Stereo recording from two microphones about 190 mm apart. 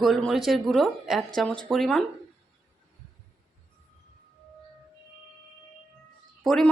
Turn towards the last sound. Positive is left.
turn(degrees=0)  # may be behind; listen again after turning